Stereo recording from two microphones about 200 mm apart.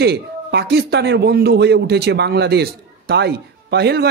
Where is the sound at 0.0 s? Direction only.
55° right (ahead or behind).